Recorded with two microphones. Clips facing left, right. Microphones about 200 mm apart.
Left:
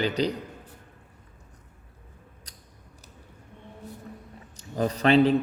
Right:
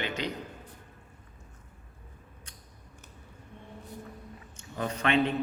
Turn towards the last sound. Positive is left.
turn(degrees=35)  # may be behind; listen again after turning